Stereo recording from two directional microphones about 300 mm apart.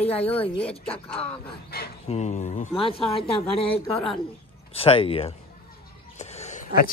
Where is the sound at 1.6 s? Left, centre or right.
Left.